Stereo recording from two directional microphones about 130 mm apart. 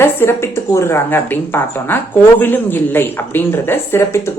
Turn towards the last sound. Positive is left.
turn(degrees=20)  # may be behind; listen again after turning